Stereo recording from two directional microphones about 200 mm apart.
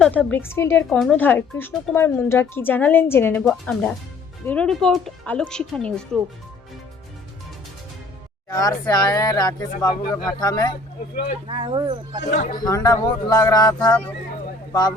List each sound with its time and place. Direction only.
0.0 s speech: 5° left (ahead or behind)
0.9 s speech: centre (ahead or behind)
8.4 s speech: 20° left (ahead or behind)
11.4 s speech: 25° right (ahead or behind)
12.5 s speech: 20° left (ahead or behind)